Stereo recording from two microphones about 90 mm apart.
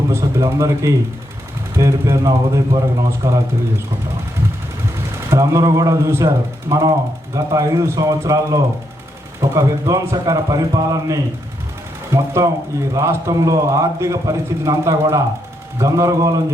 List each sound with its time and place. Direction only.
0.1 s a man's voice: 35° right (ahead or behind)
5.3 s a man's voice: 35° right (ahead or behind)